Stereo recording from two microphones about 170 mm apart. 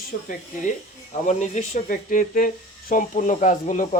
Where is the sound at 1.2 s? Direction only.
45° left (ahead or behind).